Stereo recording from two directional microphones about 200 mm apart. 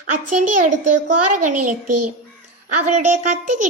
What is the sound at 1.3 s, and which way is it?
Child singing, 40° right (ahead or behind).